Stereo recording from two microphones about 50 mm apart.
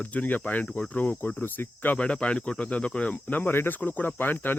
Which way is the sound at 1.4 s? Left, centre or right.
Left.